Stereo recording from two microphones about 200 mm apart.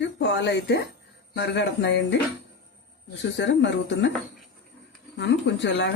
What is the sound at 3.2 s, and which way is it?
Speech, 60° left (ahead or behind).